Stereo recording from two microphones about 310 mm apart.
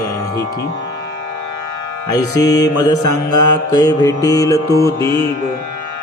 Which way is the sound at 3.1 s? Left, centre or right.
Left.